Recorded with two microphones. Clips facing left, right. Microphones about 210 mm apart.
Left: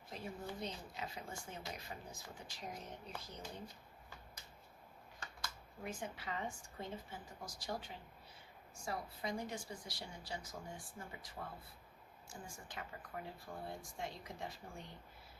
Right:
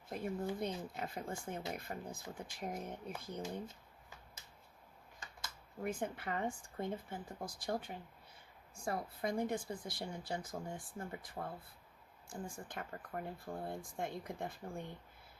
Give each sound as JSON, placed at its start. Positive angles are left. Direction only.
{"t": 0.1, "sound": "speech", "side_deg": -55}
{"t": 5.8, "sound": "speech", "side_deg": -55}